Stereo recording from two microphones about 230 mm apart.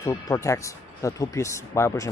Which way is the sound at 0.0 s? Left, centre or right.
Centre.